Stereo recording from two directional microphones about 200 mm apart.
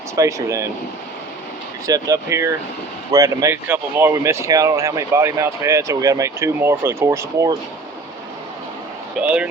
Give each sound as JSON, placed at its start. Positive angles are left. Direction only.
{"t": 0.2, "sound": "speech", "side_deg": -15}
{"t": 1.9, "sound": "speech", "side_deg": -15}
{"t": 9.2, "sound": "speech", "side_deg": -5}